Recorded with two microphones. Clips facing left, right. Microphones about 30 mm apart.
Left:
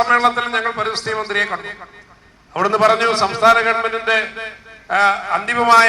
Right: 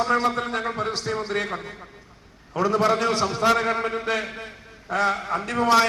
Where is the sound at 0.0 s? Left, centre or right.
Left.